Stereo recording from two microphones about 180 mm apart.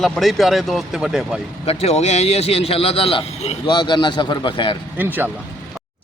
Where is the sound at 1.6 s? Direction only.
35° left (ahead or behind).